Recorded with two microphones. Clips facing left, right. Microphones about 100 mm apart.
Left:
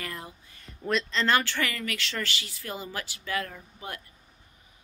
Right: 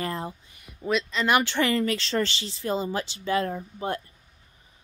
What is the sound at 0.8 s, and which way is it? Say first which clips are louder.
A woman's voice: right 2 dB; 5° right (ahead or behind).